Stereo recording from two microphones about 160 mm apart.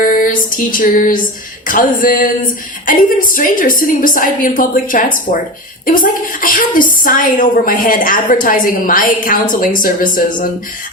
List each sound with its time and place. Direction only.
0.0 s music: 60° left (ahead or behind)
1.6 s a woman's voice: 55° left (ahead or behind)